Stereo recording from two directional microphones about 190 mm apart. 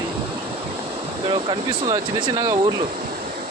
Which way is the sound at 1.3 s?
25° right (ahead or behind).